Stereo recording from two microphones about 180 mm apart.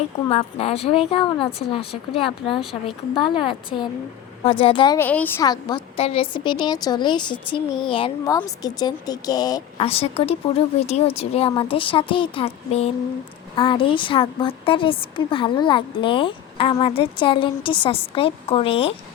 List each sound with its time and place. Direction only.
0.3 s a woman's voice: 35° left (ahead or behind)
4.9 s a woman's voice: 10° left (ahead or behind)
6.0 s a woman's voice: 30° left (ahead or behind)
9.7 s a woman's voice: 35° left (ahead or behind)